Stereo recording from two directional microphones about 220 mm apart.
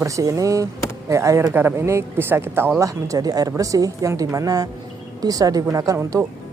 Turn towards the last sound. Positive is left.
turn(degrees=-10)  # may be behind; listen again after turning